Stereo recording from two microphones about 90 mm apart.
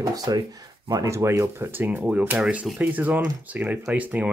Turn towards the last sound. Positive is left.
turn(degrees=-15)  # may be behind; listen again after turning